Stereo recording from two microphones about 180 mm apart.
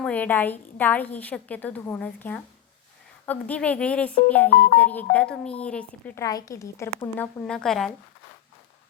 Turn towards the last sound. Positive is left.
turn(degrees=0)  # may be behind; listen again after turning